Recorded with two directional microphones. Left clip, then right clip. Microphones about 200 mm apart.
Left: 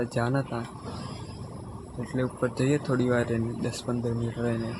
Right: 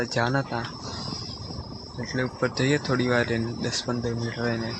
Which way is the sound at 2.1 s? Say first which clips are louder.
Right 2 dB; 10° left (ahead or behind).